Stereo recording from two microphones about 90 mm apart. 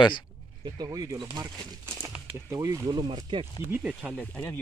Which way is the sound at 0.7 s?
40° right (ahead or behind).